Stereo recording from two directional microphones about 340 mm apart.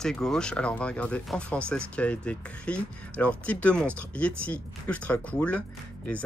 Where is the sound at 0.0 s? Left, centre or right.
Centre.